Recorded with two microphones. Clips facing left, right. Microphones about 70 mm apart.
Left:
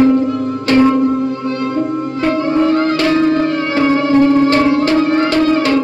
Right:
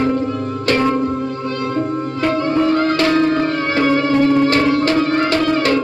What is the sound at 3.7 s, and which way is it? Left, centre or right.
Music, left.